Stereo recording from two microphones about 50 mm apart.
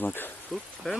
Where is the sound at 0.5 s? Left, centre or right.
Centre.